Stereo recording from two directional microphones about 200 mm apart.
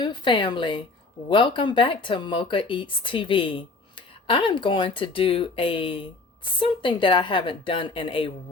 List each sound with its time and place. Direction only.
0.0 s speech: 25° left (ahead or behind)